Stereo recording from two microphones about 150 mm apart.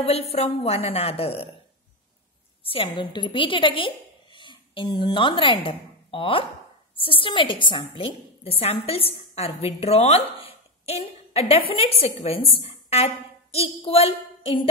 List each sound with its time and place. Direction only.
0.0 s a woman's voice: 45° left (ahead or behind)
2.6 s a woman's voice: 40° left (ahead or behind)